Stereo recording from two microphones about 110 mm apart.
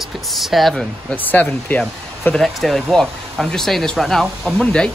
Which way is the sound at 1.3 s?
15° left (ahead or behind).